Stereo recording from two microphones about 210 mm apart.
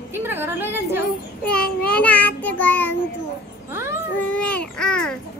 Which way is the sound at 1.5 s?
5° left (ahead or behind).